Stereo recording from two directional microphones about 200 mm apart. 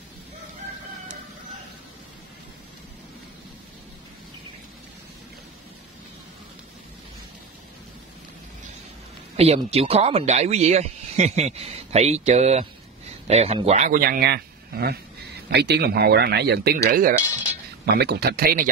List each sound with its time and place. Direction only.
9.4 s speech: 30° right (ahead or behind); by 18.7 s 50° right (ahead or behind)